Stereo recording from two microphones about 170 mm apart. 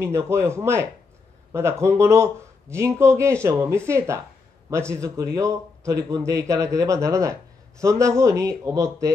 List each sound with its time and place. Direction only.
0.0 s a man's voice: 15° right (ahead or behind)